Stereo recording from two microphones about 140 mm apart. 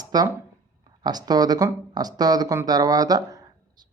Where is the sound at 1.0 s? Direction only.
30° right (ahead or behind).